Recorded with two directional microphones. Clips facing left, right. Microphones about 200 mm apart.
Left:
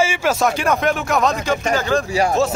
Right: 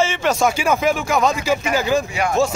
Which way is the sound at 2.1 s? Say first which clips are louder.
Left 4 dB; 35° left (ahead or behind).